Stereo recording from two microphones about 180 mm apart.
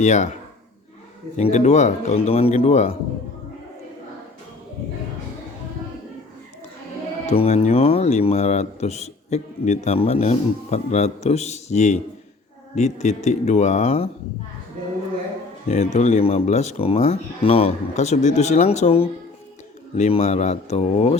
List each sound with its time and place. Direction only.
0.0 s a man's voice: 40° left (ahead or behind)
1.4 s a man's voice: 40° left (ahead or behind)
7.3 s a man's voice: 35° left (ahead or behind)
15.7 s a man's voice: 40° left (ahead or behind)